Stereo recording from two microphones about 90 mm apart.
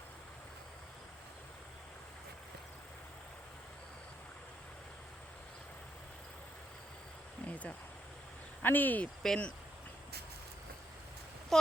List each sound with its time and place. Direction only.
7.4 s a sound: 15° left (ahead or behind)
8.6 s speech: 20° left (ahead or behind)
9.2 s speech: 5° left (ahead or behind)